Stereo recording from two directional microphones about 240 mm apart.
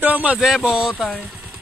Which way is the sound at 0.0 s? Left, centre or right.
Centre.